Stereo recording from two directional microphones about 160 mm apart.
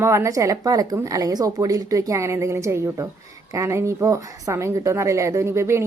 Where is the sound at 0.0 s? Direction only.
20° right (ahead or behind).